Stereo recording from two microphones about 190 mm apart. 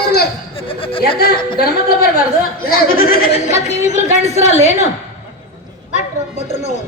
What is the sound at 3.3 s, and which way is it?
A woman's voice, 35° left (ahead or behind).